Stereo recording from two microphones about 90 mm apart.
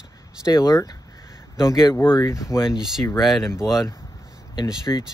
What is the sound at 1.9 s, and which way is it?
Speech, 25° left (ahead or behind).